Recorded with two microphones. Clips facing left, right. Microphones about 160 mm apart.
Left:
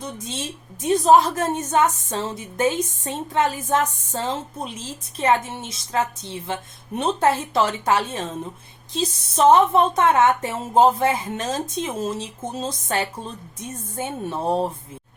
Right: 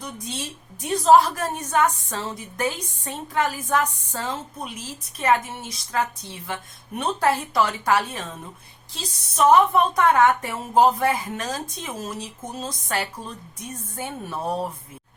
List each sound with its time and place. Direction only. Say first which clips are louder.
0.0 s a woman's voice: left 2 dB; 25° left (ahead or behind)